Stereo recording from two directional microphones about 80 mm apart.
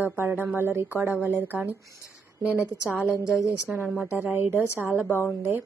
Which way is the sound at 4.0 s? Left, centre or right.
Right.